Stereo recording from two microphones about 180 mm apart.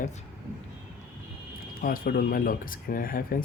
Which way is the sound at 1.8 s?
50° left (ahead or behind).